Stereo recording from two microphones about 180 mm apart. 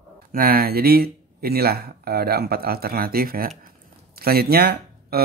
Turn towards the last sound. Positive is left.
turn(degrees=-60)  # may be behind; listen again after turning